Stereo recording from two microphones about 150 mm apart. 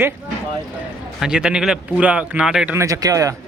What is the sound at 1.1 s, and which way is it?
Speech, 5° right (ahead or behind).